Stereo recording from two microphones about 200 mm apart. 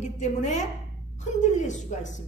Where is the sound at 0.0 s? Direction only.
35° left (ahead or behind).